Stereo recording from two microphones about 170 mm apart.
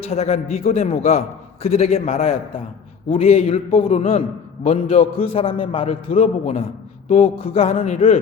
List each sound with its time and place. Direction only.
0.0 s a man's voice: 40° left (ahead or behind)